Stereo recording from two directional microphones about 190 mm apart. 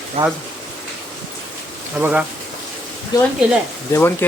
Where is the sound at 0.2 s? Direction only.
30° right (ahead or behind).